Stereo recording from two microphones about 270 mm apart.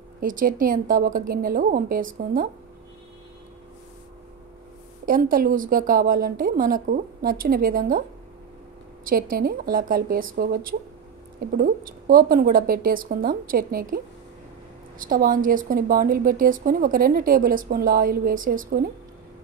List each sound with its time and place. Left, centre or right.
0.2 s a woman's voice: right
5.0 s a woman's voice: right
9.0 s a woman's voice: right